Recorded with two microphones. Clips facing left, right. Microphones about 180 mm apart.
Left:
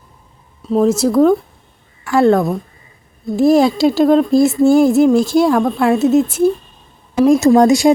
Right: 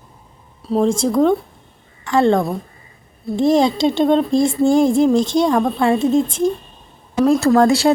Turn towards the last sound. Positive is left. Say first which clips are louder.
# left 3 dB
turn(degrees=15)  # may be behind; listen again after turning